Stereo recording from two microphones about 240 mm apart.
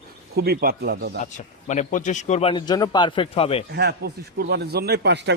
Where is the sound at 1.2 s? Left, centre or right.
Left.